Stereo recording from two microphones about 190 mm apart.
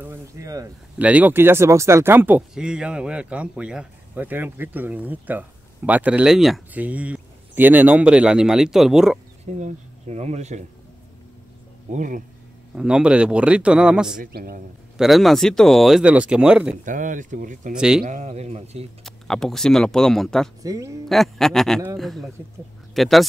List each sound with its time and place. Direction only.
0.0 s speech: 15° right (ahead or behind)
9.5 s speech: 40° right (ahead or behind)
11.9 s speech: 40° right (ahead or behind)
12.7 s speech: 5° right (ahead or behind)
14.2 s speech: 50° right (ahead or behind)
15.0 s speech: centre (ahead or behind)
16.8 s speech: 45° right (ahead or behind)
17.7 s speech: 5° right (ahead or behind)
18.0 s speech: 40° right (ahead or behind)
19.0 s speech: 5° left (ahead or behind)
20.6 s speech: 15° right (ahead or behind)
21.1 s speech: centre (ahead or behind)